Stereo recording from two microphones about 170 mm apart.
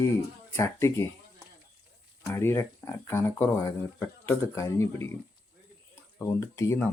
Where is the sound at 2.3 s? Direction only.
15° left (ahead or behind).